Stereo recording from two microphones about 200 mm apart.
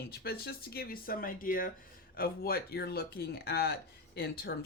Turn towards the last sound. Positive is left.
turn(degrees=55)  # may be behind; listen again after turning